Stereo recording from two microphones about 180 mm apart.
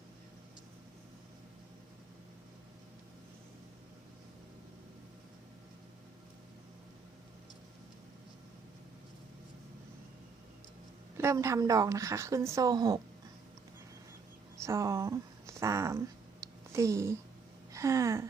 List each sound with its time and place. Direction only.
11.2 s a woman's voice: 15° right (ahead or behind)
14.6 s a woman's voice: 15° right (ahead or behind)
17.7 s a sound: 15° right (ahead or behind)